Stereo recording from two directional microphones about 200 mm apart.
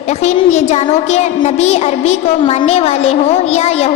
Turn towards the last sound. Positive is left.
turn(degrees=30)  # may be behind; listen again after turning